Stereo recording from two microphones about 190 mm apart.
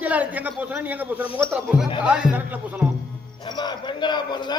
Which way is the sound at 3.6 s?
25° left (ahead or behind).